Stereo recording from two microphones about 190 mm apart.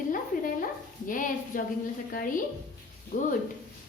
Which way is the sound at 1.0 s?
45° left (ahead or behind).